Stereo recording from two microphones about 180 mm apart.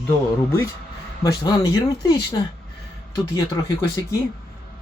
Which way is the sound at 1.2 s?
20° left (ahead or behind).